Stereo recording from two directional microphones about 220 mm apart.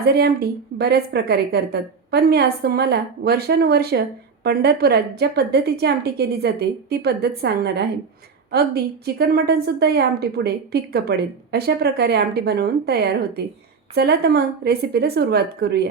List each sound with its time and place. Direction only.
0.0 s a woman's voice: 45° right (ahead or behind)